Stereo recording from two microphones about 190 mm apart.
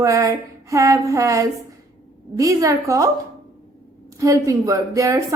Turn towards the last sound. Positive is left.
turn(degrees=-15)  # may be behind; listen again after turning